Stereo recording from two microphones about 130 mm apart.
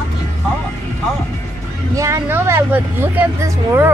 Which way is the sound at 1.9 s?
25° right (ahead or behind).